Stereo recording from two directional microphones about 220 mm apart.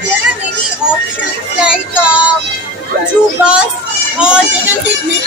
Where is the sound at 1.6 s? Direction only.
5° right (ahead or behind).